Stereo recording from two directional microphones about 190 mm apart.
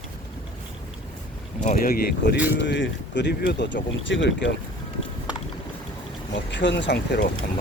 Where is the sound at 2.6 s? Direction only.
65° left (ahead or behind).